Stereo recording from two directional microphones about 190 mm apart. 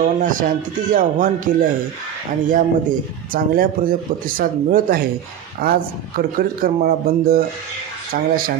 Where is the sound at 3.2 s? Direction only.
50° right (ahead or behind).